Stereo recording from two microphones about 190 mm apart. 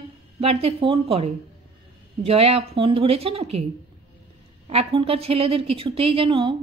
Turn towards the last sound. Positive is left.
turn(degrees=-30)  # may be behind; listen again after turning